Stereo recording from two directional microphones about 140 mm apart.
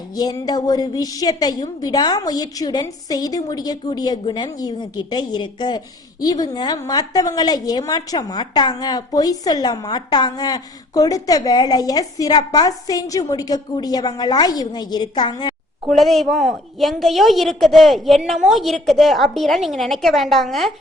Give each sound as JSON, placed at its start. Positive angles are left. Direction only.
{"t": 0.1, "sound": "a woman's voice", "side_deg": 25}
{"t": 15.9, "sound": "a woman's voice", "side_deg": 0}